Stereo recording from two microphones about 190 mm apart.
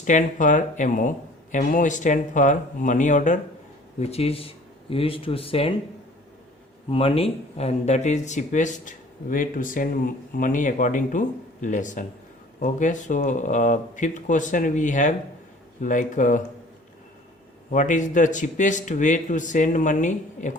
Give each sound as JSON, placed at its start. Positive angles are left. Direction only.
{"t": 0.0, "sound": "a man's voice", "side_deg": 40}
{"t": 6.9, "sound": "a man's voice", "side_deg": 30}
{"t": 17.7, "sound": "a man's voice", "side_deg": 40}